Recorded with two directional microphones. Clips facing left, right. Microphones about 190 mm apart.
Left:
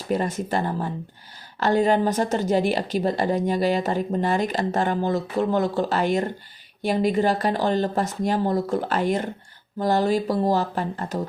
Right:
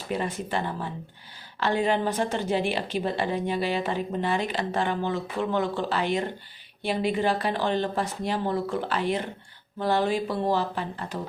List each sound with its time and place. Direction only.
0.1 s speech: 40° left (ahead or behind)